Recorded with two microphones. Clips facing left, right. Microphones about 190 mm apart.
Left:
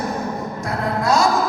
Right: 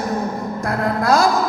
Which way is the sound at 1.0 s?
55° right (ahead or behind).